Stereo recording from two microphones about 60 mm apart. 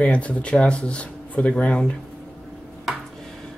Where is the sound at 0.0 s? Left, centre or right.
Left.